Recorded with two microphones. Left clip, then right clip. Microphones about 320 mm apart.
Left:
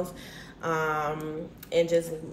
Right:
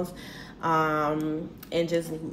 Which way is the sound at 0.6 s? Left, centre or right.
Centre.